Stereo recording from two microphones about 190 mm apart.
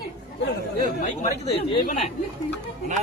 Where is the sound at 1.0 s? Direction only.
35° left (ahead or behind).